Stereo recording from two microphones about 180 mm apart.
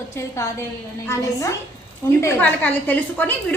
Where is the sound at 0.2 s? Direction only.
15° left (ahead or behind).